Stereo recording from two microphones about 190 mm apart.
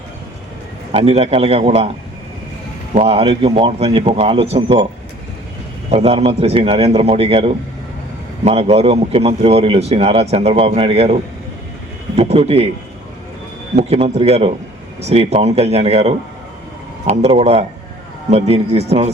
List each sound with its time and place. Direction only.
0.9 s a man's voice: 30° right (ahead or behind)
2.9 s a man's voice: 35° right (ahead or behind)
5.9 s a man's voice: 30° right (ahead or behind)
13.7 s a man's voice: 35° right (ahead or behind)